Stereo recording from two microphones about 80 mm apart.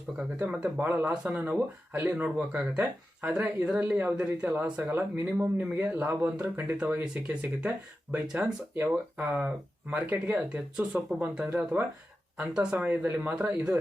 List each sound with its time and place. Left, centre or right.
0.3 s speech: centre
1.1 s a man's voice: centre
1.4 s a man's voice: right